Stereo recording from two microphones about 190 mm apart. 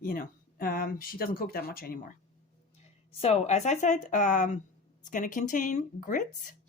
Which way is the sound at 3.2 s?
35° left (ahead or behind).